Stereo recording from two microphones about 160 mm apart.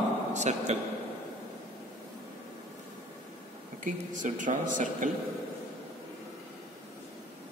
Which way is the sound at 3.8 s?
55° right (ahead or behind).